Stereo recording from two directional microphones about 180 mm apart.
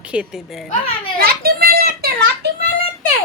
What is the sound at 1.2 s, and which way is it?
Children playing, 60° right (ahead or behind).